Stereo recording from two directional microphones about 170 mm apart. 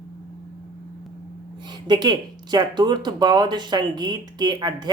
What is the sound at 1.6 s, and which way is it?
Speech, 25° right (ahead or behind).